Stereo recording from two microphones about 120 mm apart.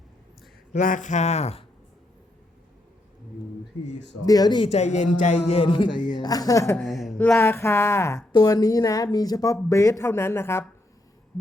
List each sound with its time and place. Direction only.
0.7 s speech: 90° left; by 1.6 s 60° left (ahead or behind)
4.3 s a woman's voice: 35° left (ahead or behind)
4.6 s speech: 65° left (ahead or behind)
5.5 s music: 45° left (ahead or behind)
6.0 s a woman's voice: 40° left (ahead or behind)
6.8 s a woman's voice: centre (ahead or behind)
7.2 s speech: 20° left (ahead or behind)
8.3 s a woman's voice: 35° left (ahead or behind); by 10.7 s 20° left (ahead or behind)